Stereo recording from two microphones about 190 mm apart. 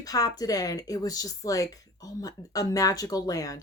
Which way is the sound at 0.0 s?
20° left (ahead or behind).